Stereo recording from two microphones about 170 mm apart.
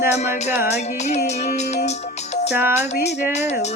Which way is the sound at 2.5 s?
10° right (ahead or behind).